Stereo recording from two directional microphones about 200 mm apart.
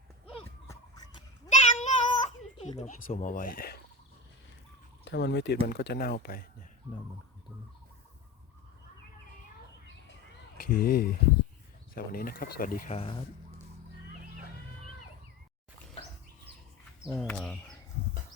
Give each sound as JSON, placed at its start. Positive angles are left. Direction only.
{"t": 1.5, "sound": "cat", "side_deg": 35}
{"t": 5.0, "sound": "speech", "side_deg": 60}
{"t": 10.7, "sound": "speech", "side_deg": 45}
{"t": 13.0, "sound": "speech", "side_deg": 25}
{"t": 17.1, "sound": "speech", "side_deg": 10}